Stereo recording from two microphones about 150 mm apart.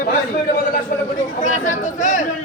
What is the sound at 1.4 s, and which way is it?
Speech, 55° left (ahead or behind).